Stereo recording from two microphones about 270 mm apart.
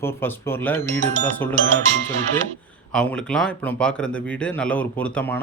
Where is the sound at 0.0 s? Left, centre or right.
Centre.